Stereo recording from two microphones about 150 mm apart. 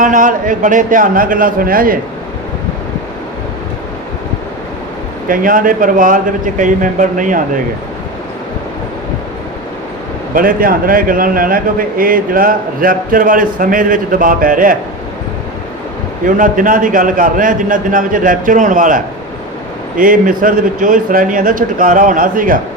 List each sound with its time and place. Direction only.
0.0 s a man's voice: 60° right (ahead or behind)
5.3 s a man's voice: 65° right (ahead or behind)
10.3 s a man's voice: 70° right (ahead or behind)
16.2 s a man's voice: 60° right (ahead or behind)